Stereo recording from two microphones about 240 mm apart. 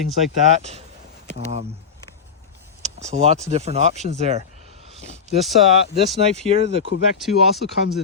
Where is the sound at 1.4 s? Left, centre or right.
Right.